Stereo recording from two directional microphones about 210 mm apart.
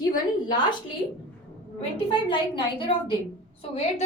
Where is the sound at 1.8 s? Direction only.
25° left (ahead or behind).